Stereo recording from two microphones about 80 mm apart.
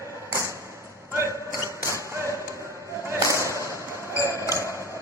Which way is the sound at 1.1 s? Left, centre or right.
Right.